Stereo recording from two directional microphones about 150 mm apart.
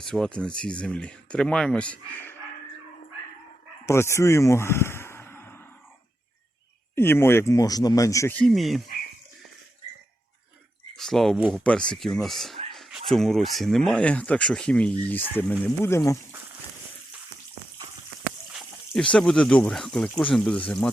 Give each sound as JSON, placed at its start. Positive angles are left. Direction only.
{"t": 0.0, "sound": "speech", "side_deg": 5}
{"t": 3.8, "sound": "speech", "side_deg": 20}
{"t": 6.9, "sound": "speech", "side_deg": 15}
{"t": 8.5, "sound": "speech", "side_deg": 0}
{"t": 10.9, "sound": "speech", "side_deg": 0}
{"t": 12.7, "sound": "a sound", "side_deg": 0}
{"t": 13.1, "sound": "speech", "side_deg": 0}
{"t": 18.5, "sound": "speech", "side_deg": 5}